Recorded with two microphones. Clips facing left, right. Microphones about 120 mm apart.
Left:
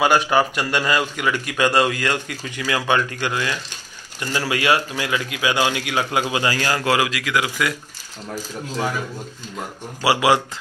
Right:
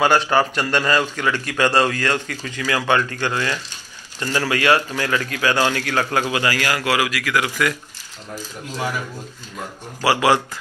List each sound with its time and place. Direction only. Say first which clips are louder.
0.0 s a man's voice: even; 10° left (ahead or behind)
10.0 s a man's voice: even; 15° left (ahead or behind)